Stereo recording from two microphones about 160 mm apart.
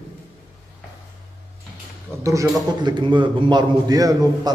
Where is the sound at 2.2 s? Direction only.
20° right (ahead or behind).